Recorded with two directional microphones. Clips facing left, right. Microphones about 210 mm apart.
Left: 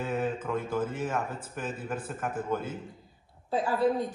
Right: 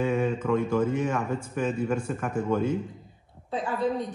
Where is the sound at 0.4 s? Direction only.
90° right.